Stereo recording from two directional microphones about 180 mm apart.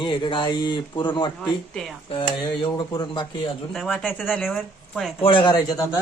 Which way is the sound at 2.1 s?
25° left (ahead or behind).